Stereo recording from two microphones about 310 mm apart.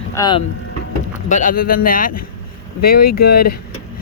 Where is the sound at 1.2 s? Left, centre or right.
Left.